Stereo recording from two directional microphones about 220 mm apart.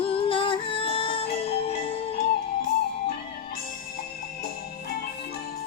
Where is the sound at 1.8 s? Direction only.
25° left (ahead or behind).